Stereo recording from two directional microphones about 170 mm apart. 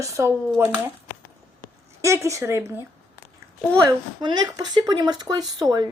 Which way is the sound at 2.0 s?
15° right (ahead or behind).